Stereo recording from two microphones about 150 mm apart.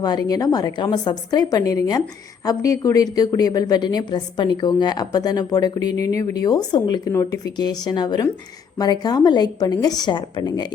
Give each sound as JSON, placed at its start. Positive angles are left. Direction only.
{"t": 0.0, "sound": "a woman's voice", "side_deg": 25}